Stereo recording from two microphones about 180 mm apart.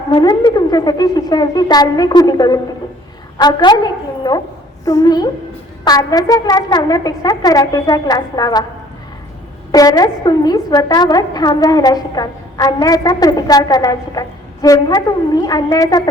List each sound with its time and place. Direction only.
0.1 s a woman's voice: 20° left (ahead or behind)
9.7 s a woman's voice: 20° left (ahead or behind)